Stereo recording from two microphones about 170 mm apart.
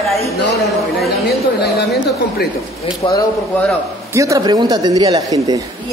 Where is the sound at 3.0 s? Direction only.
30° left (ahead or behind).